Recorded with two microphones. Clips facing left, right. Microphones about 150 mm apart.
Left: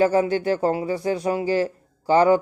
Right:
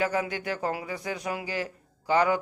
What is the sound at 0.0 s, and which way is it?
Speech, 30° left (ahead or behind).